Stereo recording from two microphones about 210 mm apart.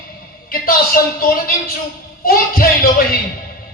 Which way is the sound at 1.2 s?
45° left (ahead or behind).